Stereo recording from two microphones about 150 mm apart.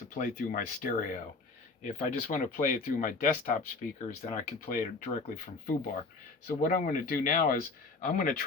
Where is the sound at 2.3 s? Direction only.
60° left (ahead or behind).